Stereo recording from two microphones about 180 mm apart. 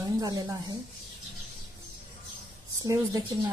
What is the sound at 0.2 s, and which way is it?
Speech, 20° right (ahead or behind).